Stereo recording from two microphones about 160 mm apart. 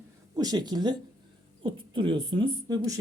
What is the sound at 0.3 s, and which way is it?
Speech, 25° right (ahead or behind).